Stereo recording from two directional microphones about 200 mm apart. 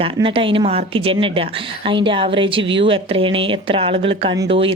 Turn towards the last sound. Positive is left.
turn(degrees=-30)  # may be behind; listen again after turning